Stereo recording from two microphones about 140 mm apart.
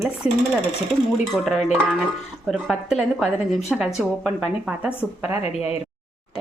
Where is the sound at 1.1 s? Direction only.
Centre (ahead or behind).